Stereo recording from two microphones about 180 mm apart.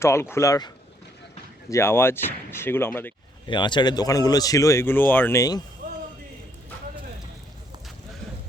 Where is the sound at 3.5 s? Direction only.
25° left (ahead or behind).